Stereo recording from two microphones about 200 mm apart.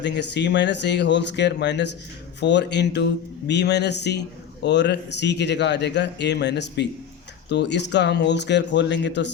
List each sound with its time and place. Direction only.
0.0 s speech: 60° left (ahead or behind)